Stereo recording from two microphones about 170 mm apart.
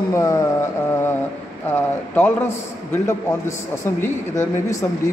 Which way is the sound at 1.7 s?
15° left (ahead or behind).